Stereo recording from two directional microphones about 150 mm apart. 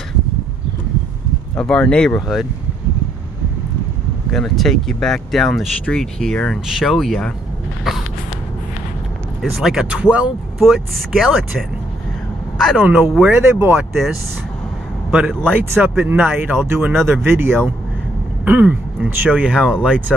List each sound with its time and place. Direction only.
1.6 s speech: 5° left (ahead or behind)
4.3 s speech: centre (ahead or behind)
9.4 s speech: 5° right (ahead or behind)
12.5 s speech: 5° right (ahead or behind)
15.0 s a man's voice: 5° right (ahead or behind)